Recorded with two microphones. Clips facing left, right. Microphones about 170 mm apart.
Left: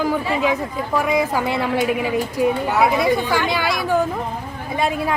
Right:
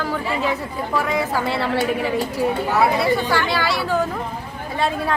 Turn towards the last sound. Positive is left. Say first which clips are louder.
# left 1 dB
turn(degrees=15)  # may be behind; listen again after turning